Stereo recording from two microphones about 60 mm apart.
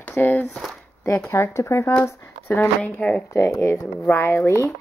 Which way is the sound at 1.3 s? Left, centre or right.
Left.